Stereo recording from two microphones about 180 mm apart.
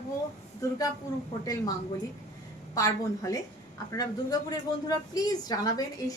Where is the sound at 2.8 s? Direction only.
15° left (ahead or behind).